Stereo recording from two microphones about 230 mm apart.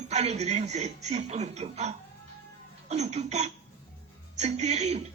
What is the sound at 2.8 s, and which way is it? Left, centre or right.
Speech, right.